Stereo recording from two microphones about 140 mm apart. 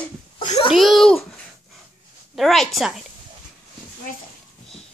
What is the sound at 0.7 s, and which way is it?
Babbling, centre (ahead or behind).